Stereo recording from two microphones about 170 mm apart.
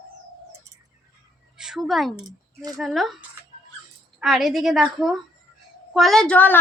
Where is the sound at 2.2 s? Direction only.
20° right (ahead or behind).